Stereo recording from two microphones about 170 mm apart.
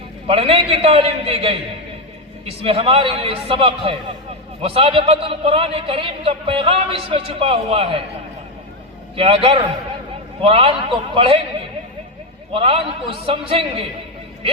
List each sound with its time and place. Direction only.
0.3 s a man's voice: 35° right (ahead or behind)
9.1 s a man's voice: 30° right (ahead or behind)
12.5 s a man's voice: 35° right (ahead or behind)